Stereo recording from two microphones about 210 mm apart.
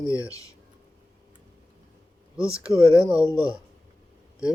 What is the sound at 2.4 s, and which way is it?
Speech, 5° right (ahead or behind).